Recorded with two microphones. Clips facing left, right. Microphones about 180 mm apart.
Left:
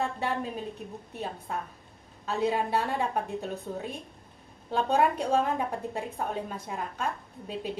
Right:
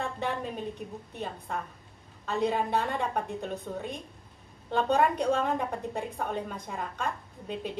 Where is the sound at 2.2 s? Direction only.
5° left (ahead or behind).